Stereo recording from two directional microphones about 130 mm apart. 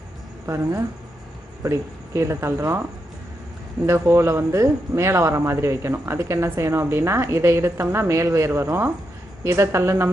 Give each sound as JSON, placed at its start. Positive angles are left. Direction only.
{"t": 1.6, "sound": "speech", "side_deg": -20}
{"t": 3.8, "sound": "speech", "side_deg": -20}